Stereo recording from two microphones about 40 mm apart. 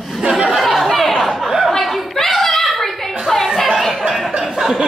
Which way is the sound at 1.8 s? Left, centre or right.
Centre.